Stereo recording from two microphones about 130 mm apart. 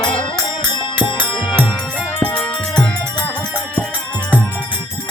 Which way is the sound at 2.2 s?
10° left (ahead or behind).